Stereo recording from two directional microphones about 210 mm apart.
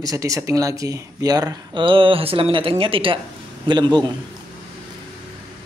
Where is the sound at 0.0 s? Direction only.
15° right (ahead or behind).